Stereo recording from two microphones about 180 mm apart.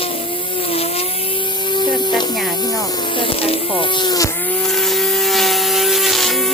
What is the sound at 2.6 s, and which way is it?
Insect, 20° left (ahead or behind).